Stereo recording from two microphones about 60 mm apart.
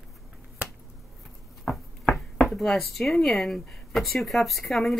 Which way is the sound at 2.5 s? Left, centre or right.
Centre.